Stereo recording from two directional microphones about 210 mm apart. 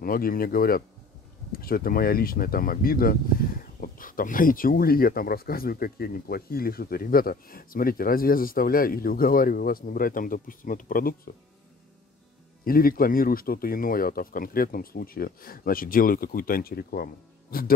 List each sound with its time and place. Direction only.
0.0 s speech: 45° left (ahead or behind)
12.6 s speech: 45° left (ahead or behind)